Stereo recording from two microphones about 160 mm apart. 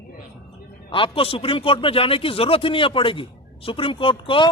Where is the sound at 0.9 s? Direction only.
35° left (ahead or behind).